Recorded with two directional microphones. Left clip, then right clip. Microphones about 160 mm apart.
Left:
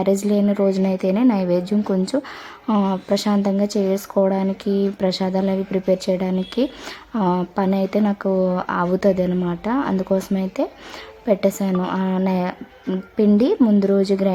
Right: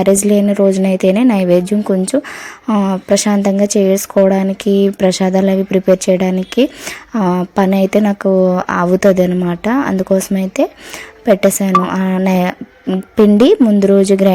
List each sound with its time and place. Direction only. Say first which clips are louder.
0.0 s a woman's voice: right 8 dB; 25° right (ahead or behind)